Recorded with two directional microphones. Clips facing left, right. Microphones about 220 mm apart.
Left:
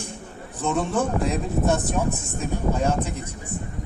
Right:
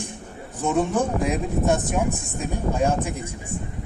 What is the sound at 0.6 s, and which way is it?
Speech, 15° right (ahead or behind).